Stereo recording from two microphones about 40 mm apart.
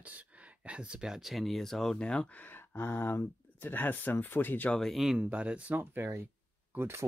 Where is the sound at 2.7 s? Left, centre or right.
Left.